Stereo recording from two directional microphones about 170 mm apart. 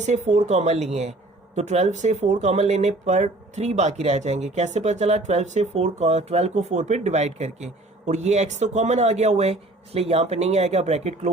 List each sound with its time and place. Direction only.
0.0 s speech: 45° right (ahead or behind)